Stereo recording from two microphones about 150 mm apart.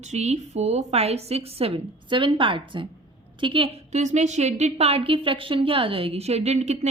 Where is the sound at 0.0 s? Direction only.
50° right (ahead or behind).